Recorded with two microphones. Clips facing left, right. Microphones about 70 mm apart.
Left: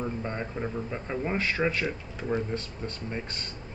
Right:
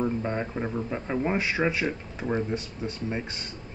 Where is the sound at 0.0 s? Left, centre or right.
Centre.